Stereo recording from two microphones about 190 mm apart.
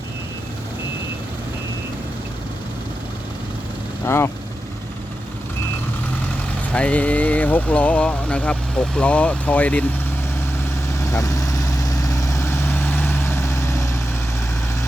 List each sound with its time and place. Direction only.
4.0 s speech: 15° left (ahead or behind)
6.7 s speech: 5° left (ahead or behind)
11.1 s vehicle: 15° left (ahead or behind)